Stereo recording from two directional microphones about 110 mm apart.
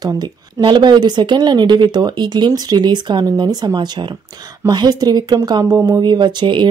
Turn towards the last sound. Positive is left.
turn(degrees=-45)  # may be behind; listen again after turning